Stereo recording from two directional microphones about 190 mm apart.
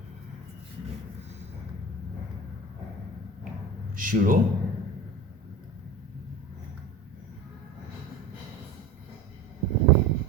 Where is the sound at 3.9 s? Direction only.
45° right (ahead or behind).